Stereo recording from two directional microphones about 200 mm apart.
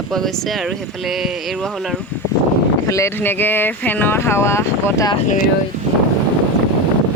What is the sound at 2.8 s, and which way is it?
Speech, 15° left (ahead or behind).